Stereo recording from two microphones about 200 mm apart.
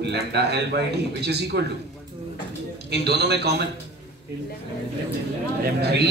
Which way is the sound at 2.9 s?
55° right (ahead or behind).